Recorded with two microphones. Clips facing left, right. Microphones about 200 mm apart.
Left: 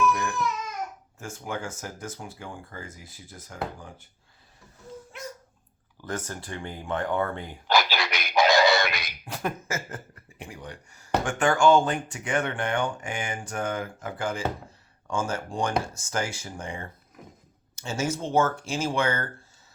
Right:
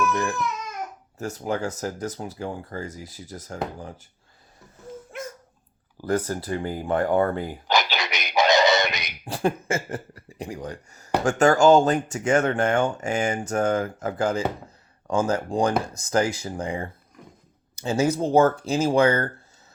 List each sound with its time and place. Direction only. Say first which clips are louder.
0.1 s crying: right 3 dB; 30° right (ahead or behind)
1.2 s speech: right 7 dB; 40° right (ahead or behind)
5.1 s dog: right 5 dB; 50° right (ahead or behind)
6.0 s speech: right 9 dB; 35° right (ahead or behind)
7.7 s a sound: left 1 dB; 20° right (ahead or behind)
9.3 s speech: right 7 dB; 30° right (ahead or behind)